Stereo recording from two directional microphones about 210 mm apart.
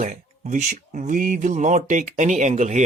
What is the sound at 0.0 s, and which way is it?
Speech, 35° right (ahead or behind).